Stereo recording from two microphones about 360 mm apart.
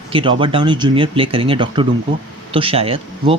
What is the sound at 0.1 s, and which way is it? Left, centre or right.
Speech, centre.